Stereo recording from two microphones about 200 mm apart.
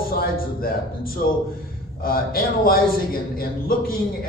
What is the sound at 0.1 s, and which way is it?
A man's voice, 45° left (ahead or behind).